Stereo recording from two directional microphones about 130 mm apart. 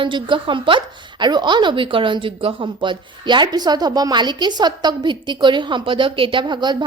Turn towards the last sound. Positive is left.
turn(degrees=-35)  # may be behind; listen again after turning